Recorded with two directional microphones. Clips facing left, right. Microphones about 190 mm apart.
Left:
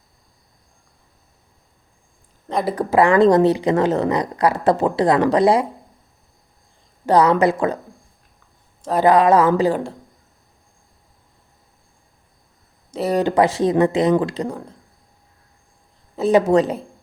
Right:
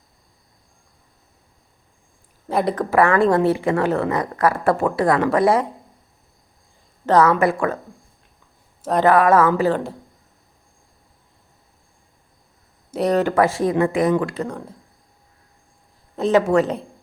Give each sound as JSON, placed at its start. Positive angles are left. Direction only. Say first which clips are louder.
{"t": 2.5, "sound": "speech", "louder": "right 1 dB", "side_deg": -5}
{"t": 2.7, "sound": "a woman's voice", "louder": "left 4 dB", "side_deg": 15}
{"t": 7.0, "sound": "a woman's voice", "louder": "left 1 dB", "side_deg": 15}
{"t": 9.0, "sound": "a woman's voice", "louder": "left 1 dB", "side_deg": 15}
{"t": 12.9, "sound": "speech", "louder": "right 2 dB", "side_deg": 0}
{"t": 13.1, "sound": "a woman's voice", "louder": "left 3 dB", "side_deg": 15}
{"t": 16.1, "sound": "speech", "louder": "left 2 dB", "side_deg": 10}